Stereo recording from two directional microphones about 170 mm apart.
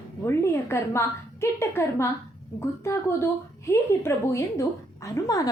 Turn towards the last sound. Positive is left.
turn(degrees=20)  # may be behind; listen again after turning